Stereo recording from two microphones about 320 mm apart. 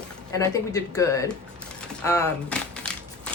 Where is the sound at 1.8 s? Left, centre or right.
Centre.